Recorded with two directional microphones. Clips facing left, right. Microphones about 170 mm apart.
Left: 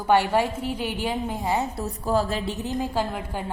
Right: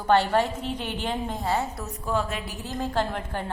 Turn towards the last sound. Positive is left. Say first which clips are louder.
# even
turn(degrees=10)  # may be behind; listen again after turning